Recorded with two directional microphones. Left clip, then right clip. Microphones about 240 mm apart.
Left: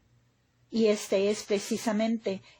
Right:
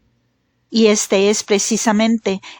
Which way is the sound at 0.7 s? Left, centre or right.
Right.